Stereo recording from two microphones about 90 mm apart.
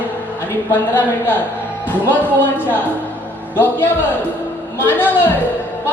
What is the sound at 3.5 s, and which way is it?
A man's voice, 25° left (ahead or behind).